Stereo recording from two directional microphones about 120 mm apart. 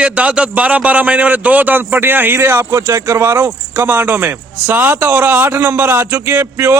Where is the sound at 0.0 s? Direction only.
10° right (ahead or behind).